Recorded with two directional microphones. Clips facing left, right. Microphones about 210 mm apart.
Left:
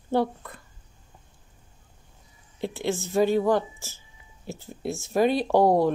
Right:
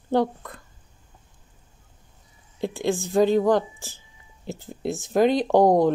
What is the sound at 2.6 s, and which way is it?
A woman's voice, 15° right (ahead or behind).